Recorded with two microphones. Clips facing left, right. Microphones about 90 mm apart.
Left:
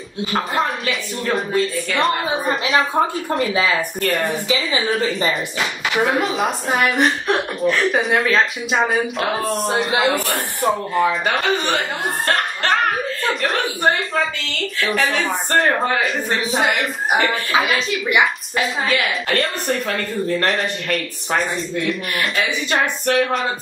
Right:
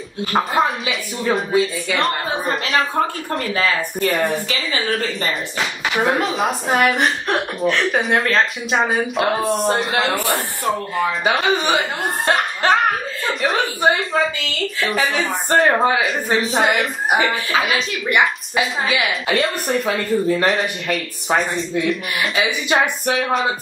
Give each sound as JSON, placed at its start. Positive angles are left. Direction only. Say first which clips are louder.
{"t": 0.6, "sound": "speech", "louder": "right 2 dB", "side_deg": 0}
{"t": 2.2, "sound": "a woman's voice", "louder": "left 1 dB", "side_deg": 10}
{"t": 6.0, "sound": "speech", "louder": "right 1 dB", "side_deg": 0}
{"t": 10.1, "sound": "speech", "louder": "right 1 dB", "side_deg": -20}
{"t": 10.7, "sound": "speech", "louder": "left 2 dB", "side_deg": 0}